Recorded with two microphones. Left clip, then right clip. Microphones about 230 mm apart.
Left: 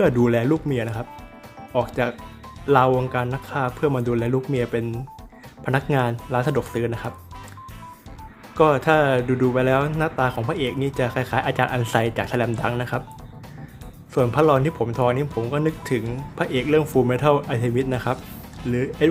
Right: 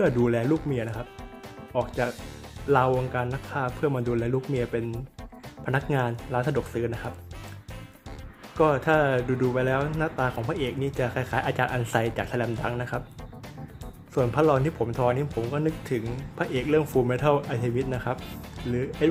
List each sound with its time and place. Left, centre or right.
0.0 s speech: centre
8.5 s speech: centre
14.1 s speech: centre